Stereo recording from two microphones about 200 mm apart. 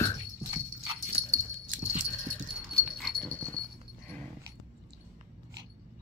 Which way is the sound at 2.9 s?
Centre (ahead or behind).